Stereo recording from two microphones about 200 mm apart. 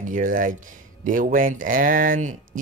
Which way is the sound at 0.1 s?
40° right (ahead or behind).